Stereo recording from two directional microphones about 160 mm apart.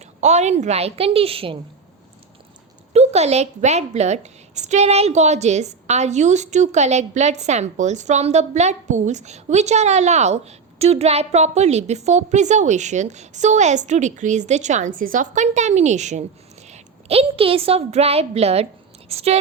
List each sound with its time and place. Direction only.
0.0 s a woman's voice: 45° right (ahead or behind)
2.9 s a woman's voice: 40° right (ahead or behind)